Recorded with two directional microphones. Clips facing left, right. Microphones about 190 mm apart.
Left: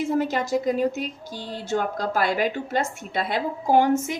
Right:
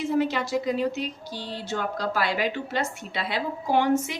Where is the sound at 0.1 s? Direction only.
45° left (ahead or behind).